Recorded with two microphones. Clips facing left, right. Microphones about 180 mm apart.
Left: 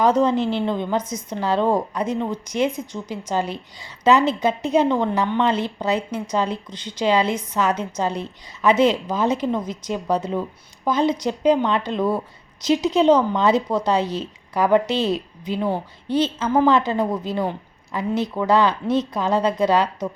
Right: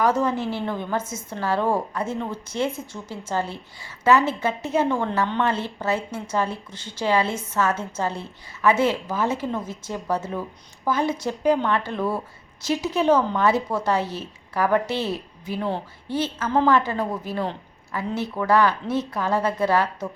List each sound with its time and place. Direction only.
0.0 s a woman's voice: 20° left (ahead or behind)